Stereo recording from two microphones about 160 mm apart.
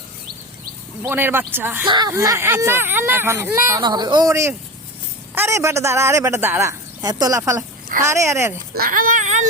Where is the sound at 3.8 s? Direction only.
25° right (ahead or behind).